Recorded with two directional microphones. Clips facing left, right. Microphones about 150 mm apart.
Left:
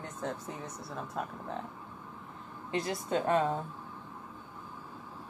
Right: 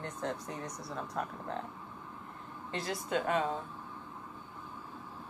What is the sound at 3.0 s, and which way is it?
Speech, 35° left (ahead or behind).